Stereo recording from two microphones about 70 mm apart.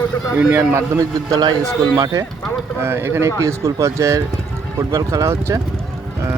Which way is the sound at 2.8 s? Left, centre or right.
Right.